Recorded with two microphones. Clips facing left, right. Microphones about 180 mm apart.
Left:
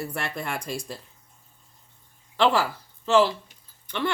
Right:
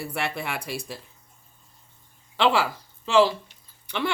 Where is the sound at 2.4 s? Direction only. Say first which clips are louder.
Even; 90° right.